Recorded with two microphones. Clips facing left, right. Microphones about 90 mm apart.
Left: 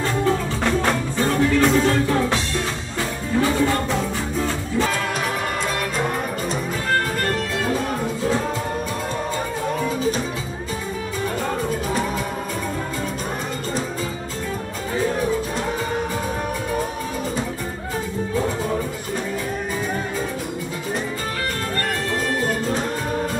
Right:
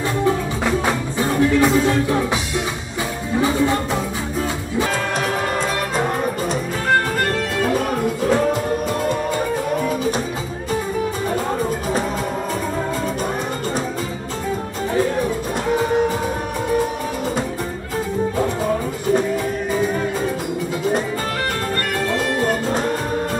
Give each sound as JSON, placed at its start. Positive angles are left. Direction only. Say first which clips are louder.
{"t": 0.7, "sound": "music", "louder": "even", "side_deg": -5}